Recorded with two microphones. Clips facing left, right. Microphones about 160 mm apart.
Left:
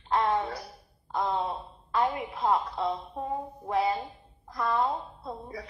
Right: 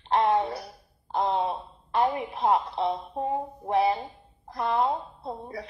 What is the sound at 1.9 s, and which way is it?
Speech, 25° right (ahead or behind).